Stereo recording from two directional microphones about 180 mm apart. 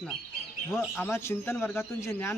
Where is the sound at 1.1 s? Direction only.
15° left (ahead or behind).